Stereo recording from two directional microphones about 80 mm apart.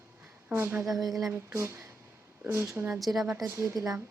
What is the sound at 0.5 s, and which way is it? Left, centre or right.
A child's voice, right.